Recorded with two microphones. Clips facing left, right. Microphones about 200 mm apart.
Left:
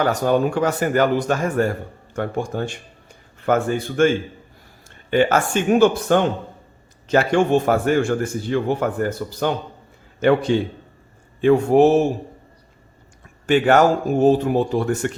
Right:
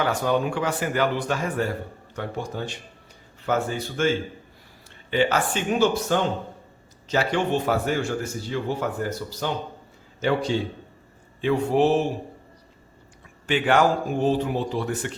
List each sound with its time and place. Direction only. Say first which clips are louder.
0.0 s a man's voice: left 5 dB; 40° left (ahead or behind)
5.1 s a man's voice: left 5 dB; 50° left (ahead or behind)
13.5 s a man's voice: left 5 dB; 45° left (ahead or behind)